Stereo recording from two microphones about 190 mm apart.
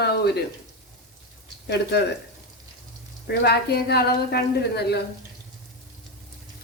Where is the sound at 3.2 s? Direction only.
60° left (ahead or behind).